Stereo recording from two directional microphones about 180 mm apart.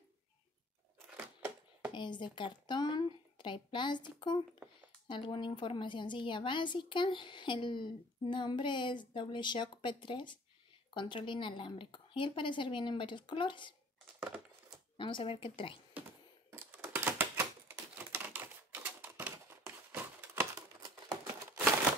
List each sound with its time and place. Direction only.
1.1 s a sound: 10° right (ahead or behind)
1.9 s a woman's voice: 25° left (ahead or behind)
15.0 s a woman's voice: 25° left (ahead or behind)
16.4 s typing: 10° right (ahead or behind)